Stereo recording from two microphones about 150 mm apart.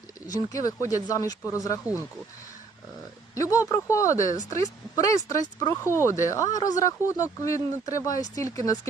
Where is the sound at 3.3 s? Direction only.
20° left (ahead or behind).